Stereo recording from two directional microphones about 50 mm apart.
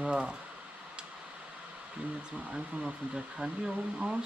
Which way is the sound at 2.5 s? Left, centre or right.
Centre.